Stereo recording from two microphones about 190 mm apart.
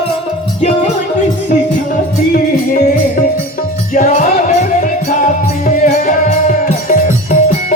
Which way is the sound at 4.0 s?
40° left (ahead or behind).